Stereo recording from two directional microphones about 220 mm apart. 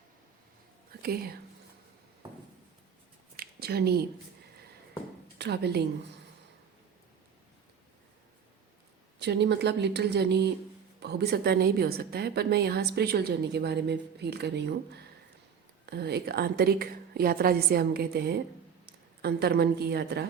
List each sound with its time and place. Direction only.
1.0 s a woman's voice: 45° right (ahead or behind)
3.3 s a sound: 45° right (ahead or behind)
5.4 s a woman's voice: 50° right (ahead or behind)
9.2 s a woman's voice: 50° right (ahead or behind)